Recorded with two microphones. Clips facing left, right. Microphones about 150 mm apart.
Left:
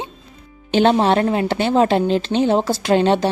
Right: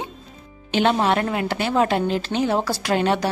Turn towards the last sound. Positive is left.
turn(degrees=25)  # may be behind; listen again after turning